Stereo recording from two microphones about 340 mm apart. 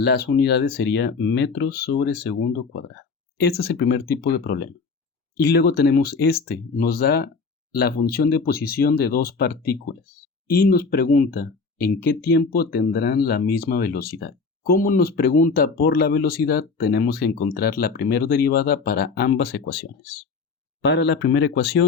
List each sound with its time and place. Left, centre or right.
0.0 s speech: left